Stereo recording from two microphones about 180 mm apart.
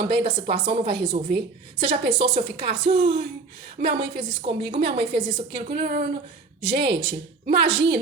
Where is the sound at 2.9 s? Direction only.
75° right (ahead or behind).